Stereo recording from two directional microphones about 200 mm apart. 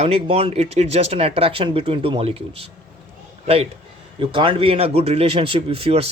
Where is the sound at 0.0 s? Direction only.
30° right (ahead or behind).